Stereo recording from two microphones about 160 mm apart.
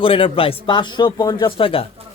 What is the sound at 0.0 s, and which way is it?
Speech, 35° left (ahead or behind).